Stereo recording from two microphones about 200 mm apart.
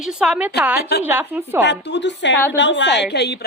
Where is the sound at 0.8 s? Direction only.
55° left (ahead or behind).